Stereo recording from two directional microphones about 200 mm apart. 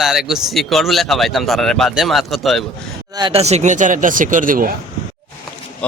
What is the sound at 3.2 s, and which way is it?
Speech, 25° right (ahead or behind).